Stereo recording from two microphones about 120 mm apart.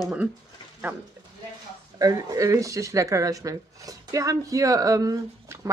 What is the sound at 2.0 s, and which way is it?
Speech, 30° right (ahead or behind).